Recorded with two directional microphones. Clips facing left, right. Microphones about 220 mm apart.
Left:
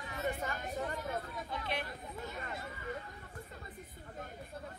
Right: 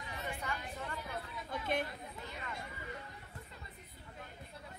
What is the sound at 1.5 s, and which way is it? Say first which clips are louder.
Chatter: right 4 dB; 50° right (ahead or behind).